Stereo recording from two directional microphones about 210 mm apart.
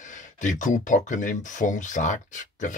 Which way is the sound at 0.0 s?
35° left (ahead or behind).